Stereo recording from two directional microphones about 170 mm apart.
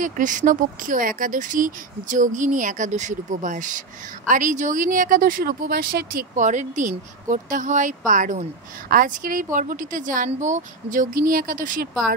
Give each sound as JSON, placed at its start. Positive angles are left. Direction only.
{"t": 0.0, "sound": "speech", "side_deg": -50}